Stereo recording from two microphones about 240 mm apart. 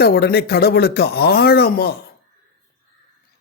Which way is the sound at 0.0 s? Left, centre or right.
Left.